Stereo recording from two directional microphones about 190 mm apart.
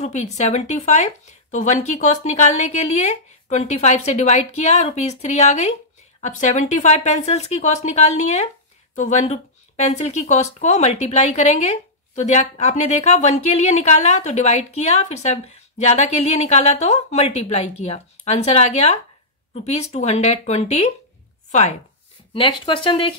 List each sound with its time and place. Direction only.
0.0 s speech: 35° left (ahead or behind)
22.3 s speech: 25° left (ahead or behind)